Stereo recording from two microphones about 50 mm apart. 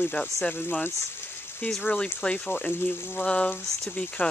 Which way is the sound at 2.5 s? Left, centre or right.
Left.